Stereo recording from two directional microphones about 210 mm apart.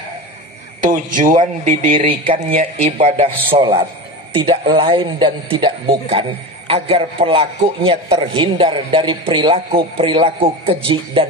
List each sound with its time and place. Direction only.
0.8 s a man's voice: 40° right (ahead or behind)